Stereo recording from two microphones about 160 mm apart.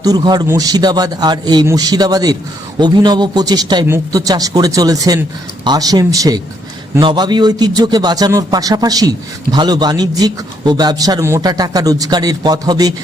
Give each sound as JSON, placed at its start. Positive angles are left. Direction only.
{"t": 0.0, "sound": "a man's voice", "side_deg": -25}